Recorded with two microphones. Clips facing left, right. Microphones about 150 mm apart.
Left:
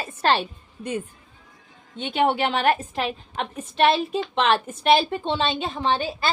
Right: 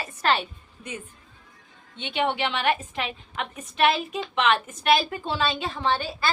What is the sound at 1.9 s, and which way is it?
A woman's voice, 45° left (ahead or behind).